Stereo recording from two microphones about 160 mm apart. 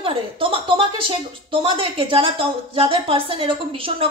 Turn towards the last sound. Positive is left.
turn(degrees=-35)  # may be behind; listen again after turning